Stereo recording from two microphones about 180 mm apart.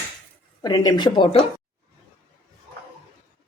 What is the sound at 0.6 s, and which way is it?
Speech, 20° left (ahead or behind).